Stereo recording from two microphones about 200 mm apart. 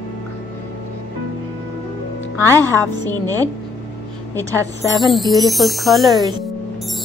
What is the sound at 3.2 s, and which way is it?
Speech, 20° right (ahead or behind).